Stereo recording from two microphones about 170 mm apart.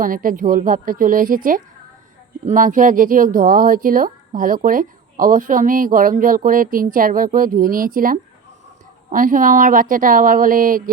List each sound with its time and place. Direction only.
0.0 s speech: 55° right (ahead or behind)